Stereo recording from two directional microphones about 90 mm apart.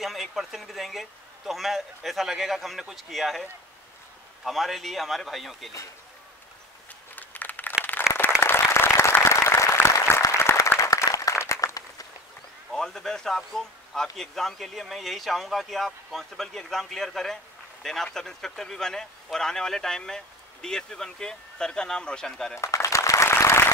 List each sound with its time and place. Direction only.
0.0 s a man's voice: centre (ahead or behind)
4.5 s a man's voice: centre (ahead or behind)
7.2 s a sound: 20° left (ahead or behind)
7.9 s applause: 20° left (ahead or behind)
8.4 s applause: 30° left (ahead or behind)
12.7 s a man's voice: 5° left (ahead or behind)
22.6 s applause: 35° left (ahead or behind)